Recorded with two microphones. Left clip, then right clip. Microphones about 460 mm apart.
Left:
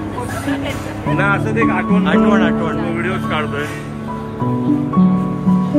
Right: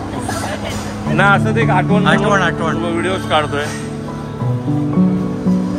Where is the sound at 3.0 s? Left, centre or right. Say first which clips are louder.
Right 4 dB; centre.